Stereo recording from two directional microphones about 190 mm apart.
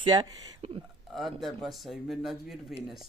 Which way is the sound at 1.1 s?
Centre (ahead or behind).